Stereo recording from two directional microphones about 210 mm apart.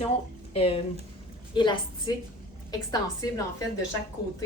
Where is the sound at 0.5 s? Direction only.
30° left (ahead or behind).